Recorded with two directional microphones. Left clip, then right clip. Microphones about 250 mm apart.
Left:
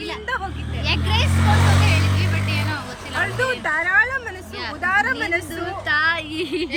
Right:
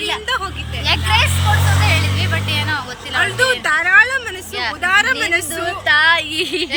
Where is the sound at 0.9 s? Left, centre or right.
Centre.